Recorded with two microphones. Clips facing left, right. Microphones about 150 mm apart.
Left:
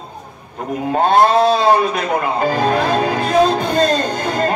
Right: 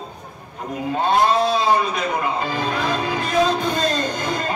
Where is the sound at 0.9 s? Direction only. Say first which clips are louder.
Left 5 dB; 60° left (ahead or behind).